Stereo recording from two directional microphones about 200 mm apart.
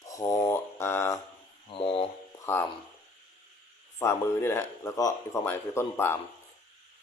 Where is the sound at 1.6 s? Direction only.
25° left (ahead or behind).